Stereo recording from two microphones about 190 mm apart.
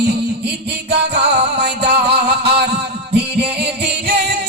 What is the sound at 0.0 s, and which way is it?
Music, 60° right (ahead or behind).